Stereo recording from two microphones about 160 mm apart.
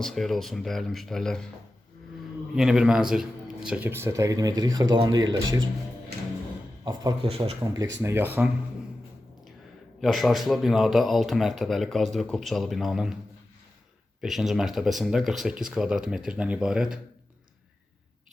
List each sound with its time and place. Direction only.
0.0 s speech: centre (ahead or behind)
2.6 s speech: 5° right (ahead or behind); by 5.5 s 25° right (ahead or behind)
6.8 s speech: 25° right (ahead or behind)
7.3 s speech: 40° right (ahead or behind)
7.6 s speech: 20° right (ahead or behind)
10.0 s speech: centre (ahead or behind)
14.2 s speech: centre (ahead or behind)